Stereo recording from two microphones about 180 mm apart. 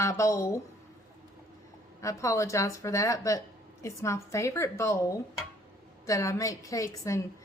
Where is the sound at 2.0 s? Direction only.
15° left (ahead or behind).